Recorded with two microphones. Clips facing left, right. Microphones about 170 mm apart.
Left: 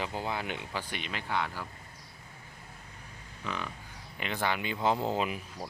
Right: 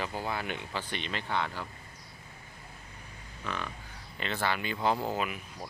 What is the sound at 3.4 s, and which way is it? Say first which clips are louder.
Speech: even; 15° left (ahead or behind).